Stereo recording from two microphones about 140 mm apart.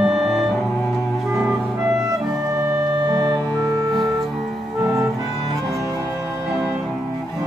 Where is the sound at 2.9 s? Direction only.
30° right (ahead or behind).